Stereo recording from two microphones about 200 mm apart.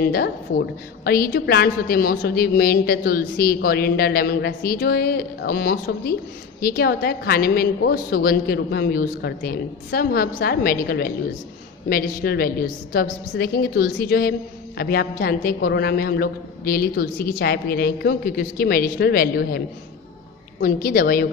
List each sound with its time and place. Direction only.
0.0 s a woman's voice: 55° left (ahead or behind)
20.6 s a woman's voice: 45° left (ahead or behind)